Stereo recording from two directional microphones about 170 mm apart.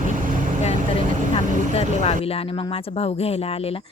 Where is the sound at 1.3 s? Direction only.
35° left (ahead or behind).